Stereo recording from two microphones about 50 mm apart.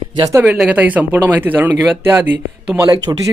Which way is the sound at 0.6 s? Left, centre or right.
Right.